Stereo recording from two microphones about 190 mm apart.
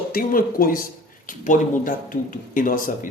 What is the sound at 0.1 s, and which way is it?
Speech, 50° left (ahead or behind).